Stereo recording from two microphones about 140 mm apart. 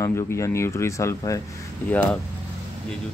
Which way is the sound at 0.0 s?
20° left (ahead or behind).